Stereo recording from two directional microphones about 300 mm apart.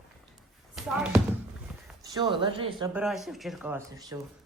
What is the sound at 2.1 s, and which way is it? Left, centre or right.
Speech, centre.